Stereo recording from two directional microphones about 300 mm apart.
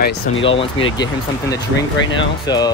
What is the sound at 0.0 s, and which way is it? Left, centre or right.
Speech, left.